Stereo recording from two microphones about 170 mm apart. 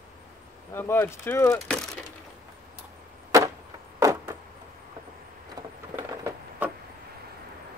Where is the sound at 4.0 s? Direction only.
20° right (ahead or behind).